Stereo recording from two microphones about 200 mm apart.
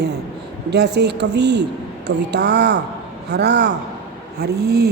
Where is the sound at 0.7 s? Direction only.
55° right (ahead or behind).